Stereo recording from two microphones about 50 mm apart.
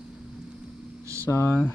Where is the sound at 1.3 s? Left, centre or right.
Left.